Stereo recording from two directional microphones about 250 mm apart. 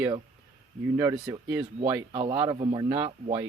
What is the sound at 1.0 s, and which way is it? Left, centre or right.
Speech, centre.